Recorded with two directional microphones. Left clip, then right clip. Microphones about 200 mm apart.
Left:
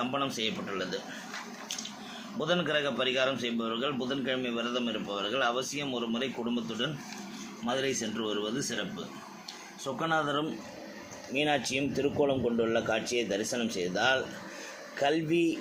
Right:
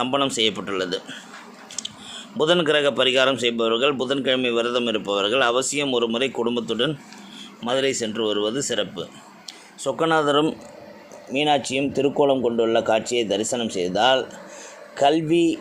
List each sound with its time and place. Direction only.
0.0 s a man's voice: 55° right (ahead or behind)
2.4 s a man's voice: 55° right (ahead or behind)
9.8 s speech: 55° right (ahead or behind)
11.3 s speech: 40° right (ahead or behind)